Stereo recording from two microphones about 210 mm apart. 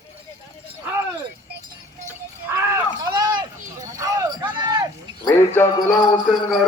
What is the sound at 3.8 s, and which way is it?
Clip-clop, 15° right (ahead or behind).